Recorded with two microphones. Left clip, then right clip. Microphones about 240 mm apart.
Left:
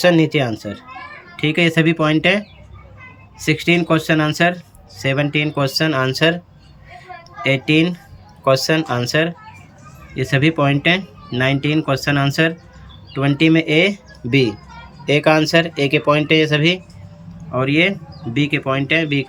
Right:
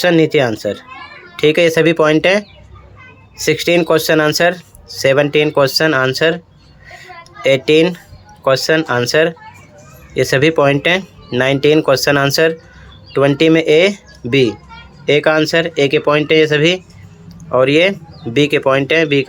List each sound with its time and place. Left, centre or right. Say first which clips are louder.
0.0 s speech: right 3 dB; centre
6.9 s a sound: right 1 dB; centre
8.4 s speech: right 3 dB; centre